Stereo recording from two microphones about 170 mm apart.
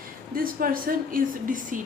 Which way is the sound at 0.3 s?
55° right (ahead or behind).